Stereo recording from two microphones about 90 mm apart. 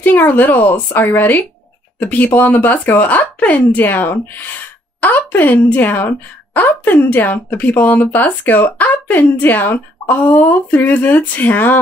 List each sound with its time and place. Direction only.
0.0 s a woman's voice: 20° left (ahead or behind)